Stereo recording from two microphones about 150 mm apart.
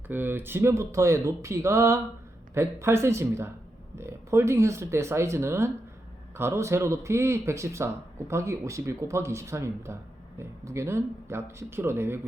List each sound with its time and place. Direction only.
0.1 s speech: 15° right (ahead or behind)